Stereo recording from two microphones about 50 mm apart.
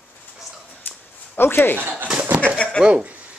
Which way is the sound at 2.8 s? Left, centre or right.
Right.